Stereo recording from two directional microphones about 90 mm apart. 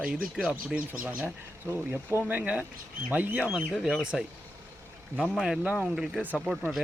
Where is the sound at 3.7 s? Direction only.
Centre (ahead or behind).